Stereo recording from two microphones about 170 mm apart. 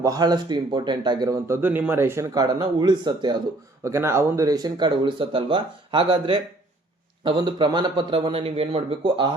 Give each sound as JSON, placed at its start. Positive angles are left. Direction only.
{"t": 0.0, "sound": "speech", "side_deg": -20}
{"t": 3.8, "sound": "speech", "side_deg": -15}